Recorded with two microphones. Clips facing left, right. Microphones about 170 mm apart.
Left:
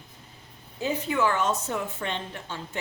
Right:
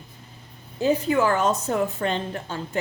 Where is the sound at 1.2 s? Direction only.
35° right (ahead or behind).